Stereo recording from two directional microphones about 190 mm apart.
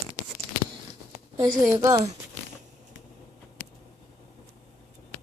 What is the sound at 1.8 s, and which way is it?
Speech, 15° right (ahead or behind).